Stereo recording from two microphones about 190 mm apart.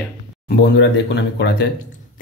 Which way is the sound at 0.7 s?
65° left (ahead or behind).